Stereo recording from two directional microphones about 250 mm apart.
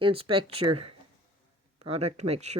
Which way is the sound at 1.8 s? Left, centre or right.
Right.